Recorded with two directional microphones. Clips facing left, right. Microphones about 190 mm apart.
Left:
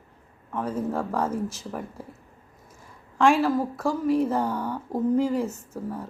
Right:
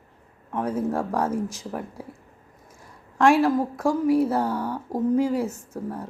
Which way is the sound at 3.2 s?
10° right (ahead or behind).